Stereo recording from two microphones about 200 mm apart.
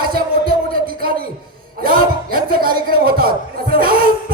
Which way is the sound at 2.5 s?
45° right (ahead or behind).